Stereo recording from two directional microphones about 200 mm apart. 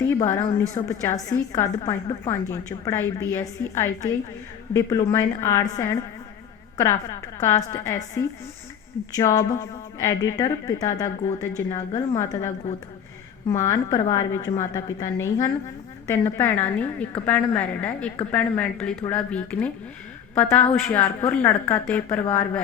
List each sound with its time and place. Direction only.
0.0 s a woman's voice: 10° left (ahead or behind)
13.5 s a woman's voice: 15° left (ahead or behind)